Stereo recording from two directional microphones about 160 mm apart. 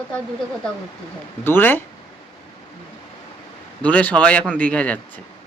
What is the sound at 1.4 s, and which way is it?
Speech, 15° left (ahead or behind).